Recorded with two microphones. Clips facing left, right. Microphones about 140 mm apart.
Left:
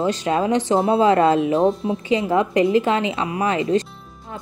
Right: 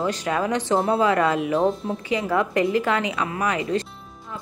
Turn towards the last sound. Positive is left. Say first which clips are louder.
# left 4 dB
turn(degrees=25)  # may be behind; listen again after turning